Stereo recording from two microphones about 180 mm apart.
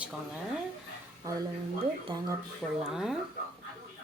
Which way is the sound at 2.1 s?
30° right (ahead or behind).